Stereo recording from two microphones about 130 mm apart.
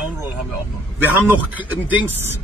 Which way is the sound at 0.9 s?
15° right (ahead or behind).